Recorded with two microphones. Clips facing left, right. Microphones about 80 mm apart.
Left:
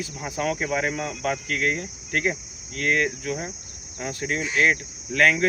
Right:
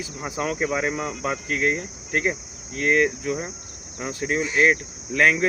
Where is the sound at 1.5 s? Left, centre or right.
Centre.